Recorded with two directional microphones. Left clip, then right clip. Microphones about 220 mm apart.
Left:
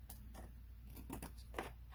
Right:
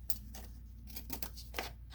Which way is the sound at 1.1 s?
15° left (ahead or behind).